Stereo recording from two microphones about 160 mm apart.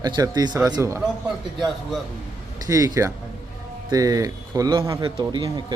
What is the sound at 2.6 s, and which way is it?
Speech, 20° right (ahead or behind).